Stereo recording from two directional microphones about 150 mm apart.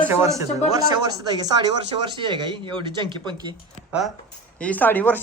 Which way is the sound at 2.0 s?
30° right (ahead or behind).